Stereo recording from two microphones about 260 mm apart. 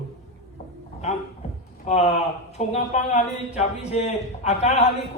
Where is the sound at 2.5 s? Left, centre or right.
Left.